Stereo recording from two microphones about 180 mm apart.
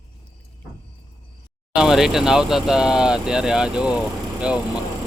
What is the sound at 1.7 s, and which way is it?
Speech, 5° right (ahead or behind).